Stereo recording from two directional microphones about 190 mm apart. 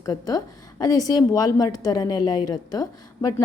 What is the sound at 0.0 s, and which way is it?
A woman's voice, 20° left (ahead or behind).